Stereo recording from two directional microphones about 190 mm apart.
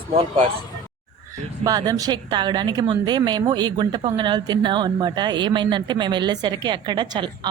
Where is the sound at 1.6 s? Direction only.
20° right (ahead or behind).